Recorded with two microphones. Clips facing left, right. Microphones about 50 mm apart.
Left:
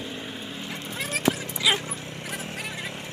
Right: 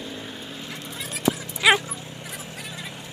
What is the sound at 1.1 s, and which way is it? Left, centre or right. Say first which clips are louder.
Clip-clop: even; left.